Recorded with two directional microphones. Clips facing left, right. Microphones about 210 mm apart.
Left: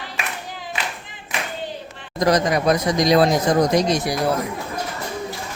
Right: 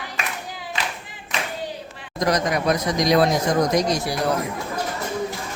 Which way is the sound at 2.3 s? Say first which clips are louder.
Left 3 dB; 30° left (ahead or behind).